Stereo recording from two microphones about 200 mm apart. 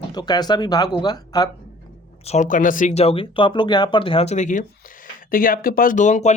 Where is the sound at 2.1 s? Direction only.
30° left (ahead or behind).